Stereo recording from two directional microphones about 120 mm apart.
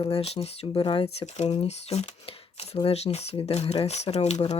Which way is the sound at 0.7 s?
45° left (ahead or behind).